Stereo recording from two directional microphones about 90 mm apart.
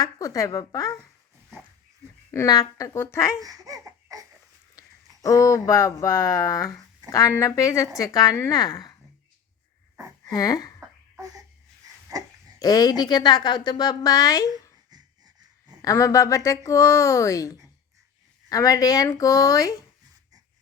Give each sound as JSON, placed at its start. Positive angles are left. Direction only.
{"t": 0.0, "sound": "a woman's voice", "side_deg": 40}
{"t": 2.5, "sound": "a woman's voice", "side_deg": 45}
{"t": 3.4, "sound": "a sound", "side_deg": -40}
{"t": 5.2, "sound": "a woman's voice", "side_deg": 40}
{"t": 10.2, "sound": "a woman's voice", "side_deg": 45}
{"t": 12.1, "sound": "a sound", "side_deg": -45}
{"t": 12.5, "sound": "a woman's voice", "side_deg": 45}
{"t": 14.8, "sound": "wheeze", "side_deg": -50}
{"t": 15.8, "sound": "a woman's voice", "side_deg": 35}